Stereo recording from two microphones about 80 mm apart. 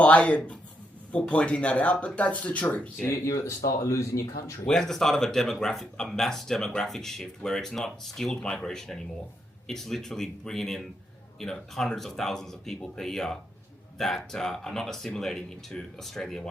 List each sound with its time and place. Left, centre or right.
0.0 s speech: centre
3.1 s speech: left
4.6 s speech: centre